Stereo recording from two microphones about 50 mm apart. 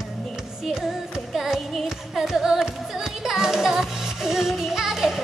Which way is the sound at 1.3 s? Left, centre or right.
Centre.